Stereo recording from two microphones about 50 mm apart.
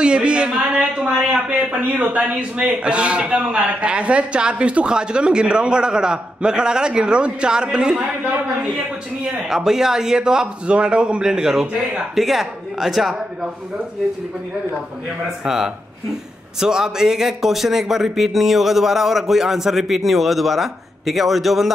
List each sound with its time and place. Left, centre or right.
0.0 s a sound: centre
1.0 s speech: right; by 13.5 s centre
15.4 s speech: centre